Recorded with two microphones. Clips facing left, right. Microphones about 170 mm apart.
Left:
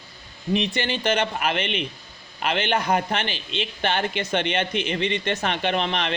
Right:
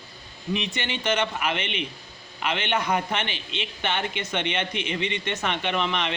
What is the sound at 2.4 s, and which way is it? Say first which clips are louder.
Speech: left 3 dB; 35° left (ahead or behind).